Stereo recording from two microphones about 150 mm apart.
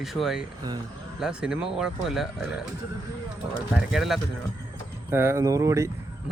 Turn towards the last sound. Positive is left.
turn(degrees=-20)  # may be behind; listen again after turning